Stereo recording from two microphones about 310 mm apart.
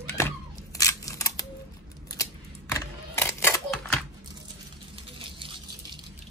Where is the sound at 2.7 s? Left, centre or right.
Centre.